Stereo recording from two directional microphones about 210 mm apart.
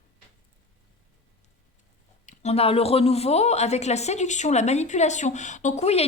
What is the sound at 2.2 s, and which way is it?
Speech, 35° left (ahead or behind).